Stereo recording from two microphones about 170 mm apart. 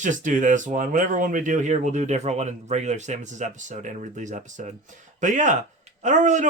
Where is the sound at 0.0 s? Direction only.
50° right (ahead or behind).